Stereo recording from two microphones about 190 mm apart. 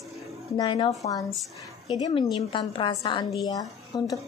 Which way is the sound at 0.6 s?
25° left (ahead or behind).